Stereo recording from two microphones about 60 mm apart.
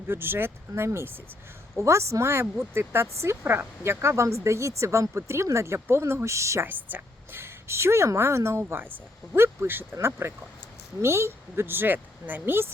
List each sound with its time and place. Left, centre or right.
0.1 s a woman's voice: right
1.8 s speech: right
3.4 s speech: right
6.7 s a woman's voice: right